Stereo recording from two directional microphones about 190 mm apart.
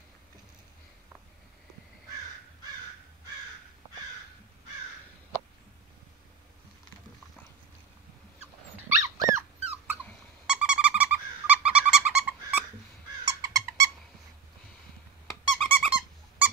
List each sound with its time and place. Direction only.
8.4 s dog: 15° right (ahead or behind)
10.4 s owl: 5° right (ahead or behind)
13.5 s squeak: 20° right (ahead or behind)
15.2 s squeak: centre (ahead or behind)